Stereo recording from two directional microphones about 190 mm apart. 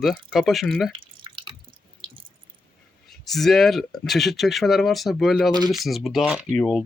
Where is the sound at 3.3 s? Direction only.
Centre (ahead or behind).